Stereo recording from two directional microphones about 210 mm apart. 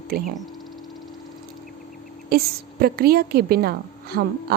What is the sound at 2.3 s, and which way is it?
A woman's voice, 45° right (ahead or behind).